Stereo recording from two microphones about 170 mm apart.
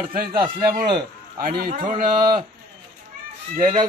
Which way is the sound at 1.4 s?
60° right (ahead or behind).